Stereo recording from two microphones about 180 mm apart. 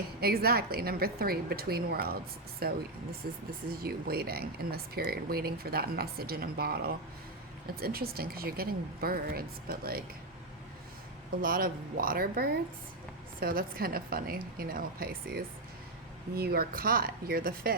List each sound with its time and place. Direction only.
0.2 s speech: 60° right (ahead or behind)
11.4 s speech: 50° right (ahead or behind)